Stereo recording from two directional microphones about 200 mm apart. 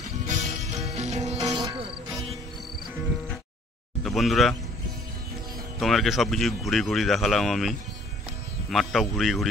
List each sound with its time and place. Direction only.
0.3 s music: 35° right (ahead or behind)
1.4 s music: 20° right (ahead or behind)
4.0 s speech: centre (ahead or behind)
5.8 s speech: centre (ahead or behind)